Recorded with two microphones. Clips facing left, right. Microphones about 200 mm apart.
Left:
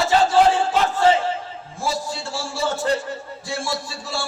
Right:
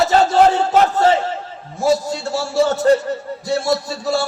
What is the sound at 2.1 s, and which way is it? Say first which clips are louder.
A man's voice: right 7 dB; 40° right (ahead or behind).